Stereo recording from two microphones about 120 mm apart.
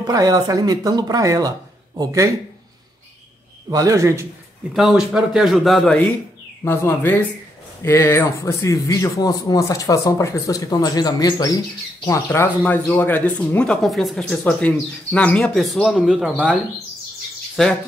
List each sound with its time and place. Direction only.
0.0 s a man's voice: 30° right (ahead or behind)
3.7 s a man's voice: 30° right (ahead or behind)
4.7 s a man's voice: 5° right (ahead or behind)
6.6 s a man's voice: 20° left (ahead or behind)
12.3 s speech: 20° left (ahead or behind)
15.5 s a man's voice: centre (ahead or behind)